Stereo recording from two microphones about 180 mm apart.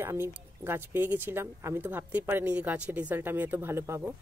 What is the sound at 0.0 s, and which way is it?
A woman's voice, 15° right (ahead or behind).